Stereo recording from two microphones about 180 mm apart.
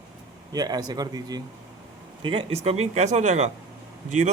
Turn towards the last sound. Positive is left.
turn(degrees=-45)  # may be behind; listen again after turning